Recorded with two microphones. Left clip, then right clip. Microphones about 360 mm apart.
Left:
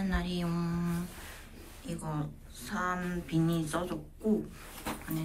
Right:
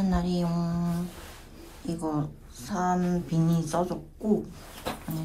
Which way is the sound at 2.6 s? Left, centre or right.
Centre.